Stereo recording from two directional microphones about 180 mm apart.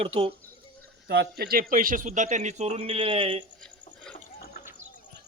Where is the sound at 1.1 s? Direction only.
60° right (ahead or behind).